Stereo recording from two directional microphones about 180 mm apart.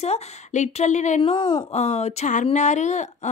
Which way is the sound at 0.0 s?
35° left (ahead or behind).